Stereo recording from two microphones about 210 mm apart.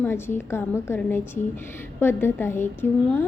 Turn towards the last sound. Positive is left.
turn(degrees=10)  # may be behind; listen again after turning